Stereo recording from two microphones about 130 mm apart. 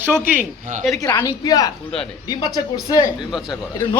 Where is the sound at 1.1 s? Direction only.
15° left (ahead or behind).